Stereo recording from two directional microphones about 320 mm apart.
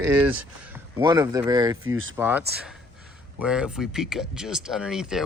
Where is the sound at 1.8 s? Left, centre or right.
Right.